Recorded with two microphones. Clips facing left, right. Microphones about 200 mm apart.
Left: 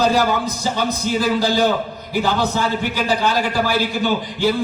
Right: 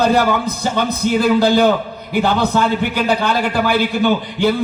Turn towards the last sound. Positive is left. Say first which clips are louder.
# right 4 dB
turn(degrees=-60)  # may be behind; listen again after turning